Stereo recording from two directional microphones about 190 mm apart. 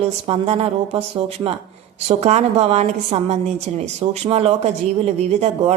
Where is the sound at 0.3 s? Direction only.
30° right (ahead or behind).